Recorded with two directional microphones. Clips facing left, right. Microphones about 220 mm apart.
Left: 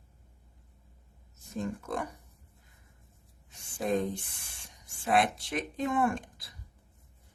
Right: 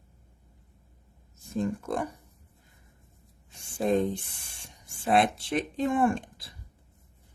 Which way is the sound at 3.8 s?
25° right (ahead or behind).